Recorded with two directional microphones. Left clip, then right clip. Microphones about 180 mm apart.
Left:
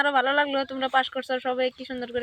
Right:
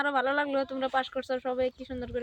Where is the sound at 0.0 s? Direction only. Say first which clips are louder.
Left 5 dB; 30° left (ahead or behind).